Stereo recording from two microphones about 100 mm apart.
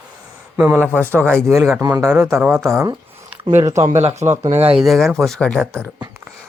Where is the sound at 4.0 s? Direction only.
90° right.